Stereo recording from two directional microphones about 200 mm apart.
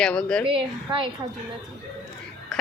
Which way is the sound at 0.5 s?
25° right (ahead or behind).